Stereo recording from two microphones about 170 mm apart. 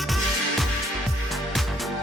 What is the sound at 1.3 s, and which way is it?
Music, centre (ahead or behind).